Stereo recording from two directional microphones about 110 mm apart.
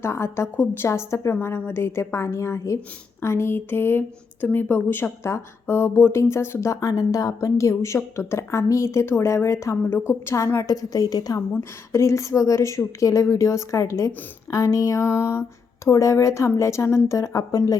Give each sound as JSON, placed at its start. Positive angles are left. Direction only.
{"t": 0.0, "sound": "speech", "side_deg": 25}